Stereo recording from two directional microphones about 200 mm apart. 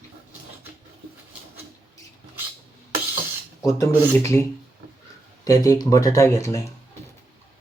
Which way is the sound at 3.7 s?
15° left (ahead or behind).